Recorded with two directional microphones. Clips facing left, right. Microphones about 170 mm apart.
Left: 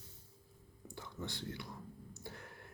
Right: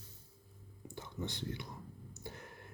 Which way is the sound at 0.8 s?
20° right (ahead or behind).